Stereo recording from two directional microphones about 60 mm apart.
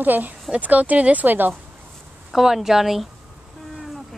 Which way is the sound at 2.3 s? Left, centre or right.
Centre.